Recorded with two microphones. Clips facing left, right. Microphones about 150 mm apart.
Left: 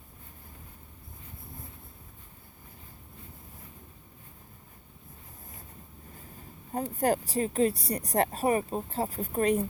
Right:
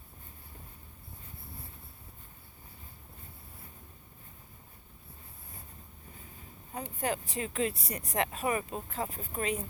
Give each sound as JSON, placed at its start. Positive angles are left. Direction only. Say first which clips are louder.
{"t": 6.7, "sound": "speech", "louder": "left 7 dB", "side_deg": 40}